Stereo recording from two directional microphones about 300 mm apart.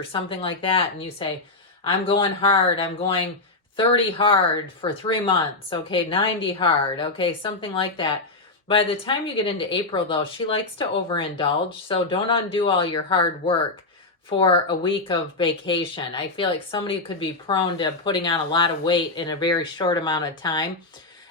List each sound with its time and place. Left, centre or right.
0.1 s speech: centre
14.3 s speech: centre